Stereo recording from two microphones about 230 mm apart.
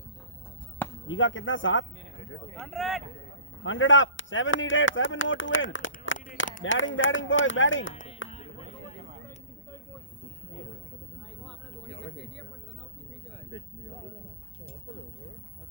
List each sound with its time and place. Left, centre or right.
1.0 s speech: left
2.6 s speech: centre
3.6 s speech: left
5.7 s a sound: left
6.6 s speech: left
8.3 s a sound: left